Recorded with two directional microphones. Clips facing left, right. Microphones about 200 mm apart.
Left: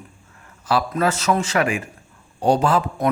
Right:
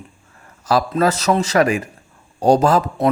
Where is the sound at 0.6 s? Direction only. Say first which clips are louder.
Right 3 dB; 40° right (ahead or behind).